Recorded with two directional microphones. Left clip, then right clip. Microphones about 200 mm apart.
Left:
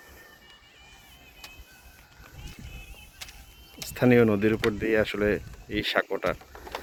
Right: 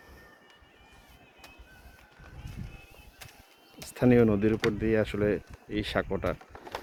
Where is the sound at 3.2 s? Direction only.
40° right (ahead or behind).